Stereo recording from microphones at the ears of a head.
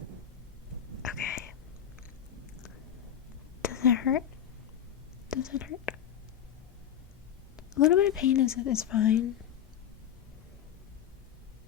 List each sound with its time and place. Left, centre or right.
1.0 s a sound: left
3.6 s whispering: left
5.3 s speech: left
7.5 s speech: left